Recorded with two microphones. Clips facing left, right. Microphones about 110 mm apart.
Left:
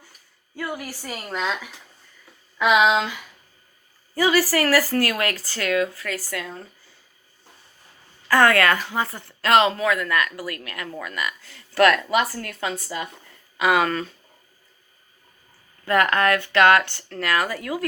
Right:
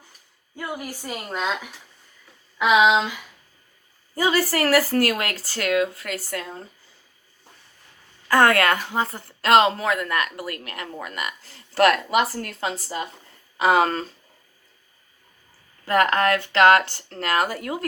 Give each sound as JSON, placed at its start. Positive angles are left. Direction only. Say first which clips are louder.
{"t": 0.5, "sound": "a woman's voice", "louder": "left 1 dB", "side_deg": -20}
{"t": 4.1, "sound": "a woman's voice", "louder": "left 2 dB", "side_deg": -25}
{"t": 8.4, "sound": "speech", "louder": "even", "side_deg": -45}
{"t": 8.9, "sound": "a woman's voice", "louder": "right 1 dB", "side_deg": -30}
{"t": 15.9, "sound": "a woman's voice", "louder": "even", "side_deg": -35}